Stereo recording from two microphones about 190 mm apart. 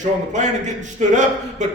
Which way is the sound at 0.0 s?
40° right (ahead or behind).